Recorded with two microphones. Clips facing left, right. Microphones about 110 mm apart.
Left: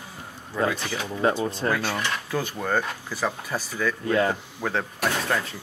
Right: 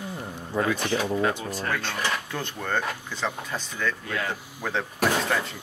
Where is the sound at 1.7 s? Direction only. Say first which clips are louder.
Right 1 dB; 10° left (ahead or behind).